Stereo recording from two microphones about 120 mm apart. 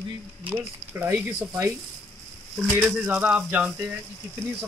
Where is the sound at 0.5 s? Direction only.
15° right (ahead or behind).